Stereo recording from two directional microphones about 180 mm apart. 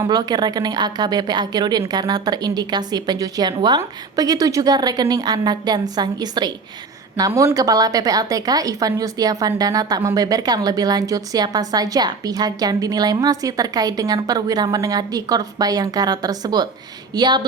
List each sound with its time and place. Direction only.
0.0 s a woman's voice: 20° right (ahead or behind)